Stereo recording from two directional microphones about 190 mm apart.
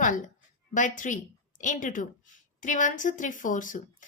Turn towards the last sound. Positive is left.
turn(degrees=45)  # may be behind; listen again after turning